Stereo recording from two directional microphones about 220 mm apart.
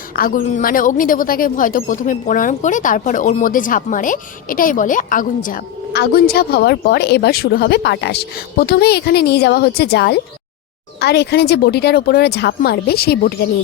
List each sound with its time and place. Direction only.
0.2 s a woman's voice: 40° left (ahead or behind)